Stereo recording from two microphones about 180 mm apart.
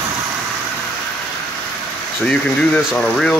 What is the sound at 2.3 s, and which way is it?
Speech, 10° left (ahead or behind).